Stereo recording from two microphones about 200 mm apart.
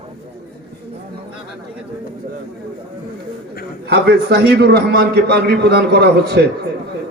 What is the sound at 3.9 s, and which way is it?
A man's voice, 55° right (ahead or behind).